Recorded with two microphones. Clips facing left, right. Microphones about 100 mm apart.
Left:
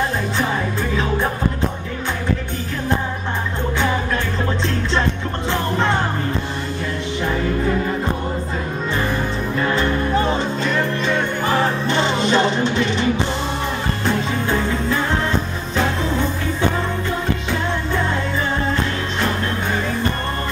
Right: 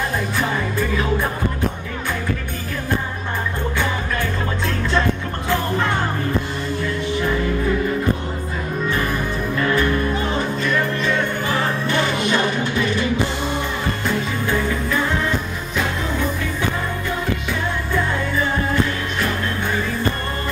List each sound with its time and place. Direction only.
4.9 s music: 25° left (ahead or behind)
10.3 s music: 25° left (ahead or behind)